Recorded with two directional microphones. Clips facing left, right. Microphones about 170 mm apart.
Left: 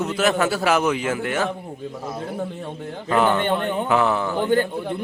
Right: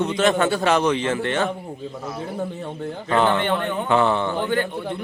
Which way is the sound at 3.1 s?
5° left (ahead or behind).